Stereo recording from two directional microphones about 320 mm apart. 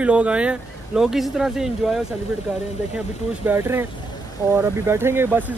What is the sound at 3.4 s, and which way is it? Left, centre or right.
Speech, centre.